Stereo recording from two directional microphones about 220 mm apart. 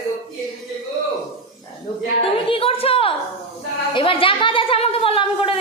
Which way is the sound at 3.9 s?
25° left (ahead or behind).